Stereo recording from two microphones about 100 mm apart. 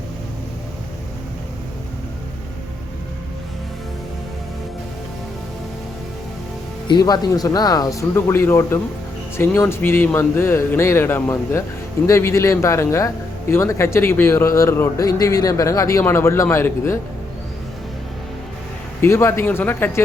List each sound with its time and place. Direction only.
7.0 s speech: 40° left (ahead or behind); by 17.0 s 25° left (ahead or behind)
19.0 s speech: 25° left (ahead or behind)